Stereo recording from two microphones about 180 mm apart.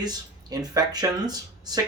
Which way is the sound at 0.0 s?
20° right (ahead or behind).